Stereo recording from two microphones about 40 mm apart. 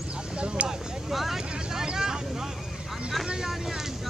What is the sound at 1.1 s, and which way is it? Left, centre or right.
Vehicle, centre.